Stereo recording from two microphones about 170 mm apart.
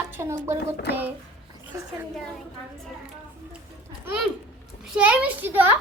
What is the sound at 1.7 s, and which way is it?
Speech, 20° right (ahead or behind).